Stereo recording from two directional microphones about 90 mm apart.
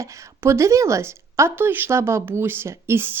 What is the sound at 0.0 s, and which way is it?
A woman's voice, 30° right (ahead or behind).